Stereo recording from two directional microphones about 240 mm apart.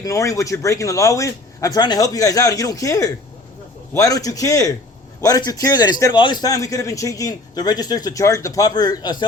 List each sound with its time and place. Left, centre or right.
0.0 s a man's voice: centre